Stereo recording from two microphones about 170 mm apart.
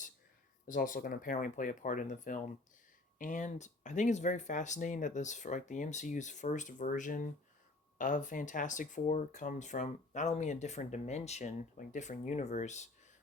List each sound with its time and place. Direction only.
0.7 s speech: 55° left (ahead or behind)